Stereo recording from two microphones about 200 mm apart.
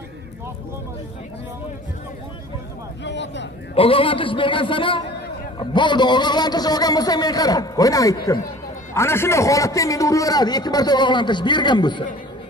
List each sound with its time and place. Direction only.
3.0 s speech: 60° left (ahead or behind)
3.7 s a man's voice: 25° left (ahead or behind)